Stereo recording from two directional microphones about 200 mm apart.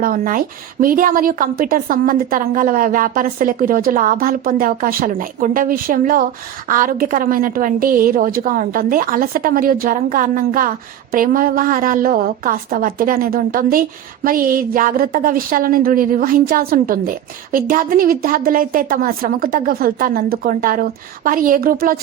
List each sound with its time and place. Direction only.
0.0 s a woman's voice: 45° right (ahead or behind)